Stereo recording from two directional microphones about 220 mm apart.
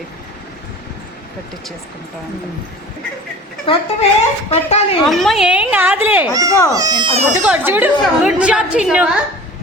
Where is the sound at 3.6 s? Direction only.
25° left (ahead or behind).